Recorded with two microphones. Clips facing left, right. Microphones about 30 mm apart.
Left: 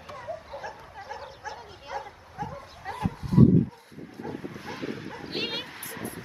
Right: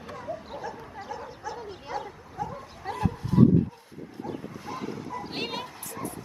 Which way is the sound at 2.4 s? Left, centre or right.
Centre.